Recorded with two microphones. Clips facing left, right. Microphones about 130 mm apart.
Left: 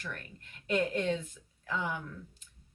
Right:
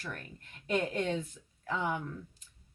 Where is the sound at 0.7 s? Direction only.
40° right (ahead or behind).